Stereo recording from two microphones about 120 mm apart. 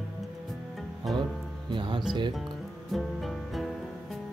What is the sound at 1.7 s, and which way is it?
Music, 40° right (ahead or behind).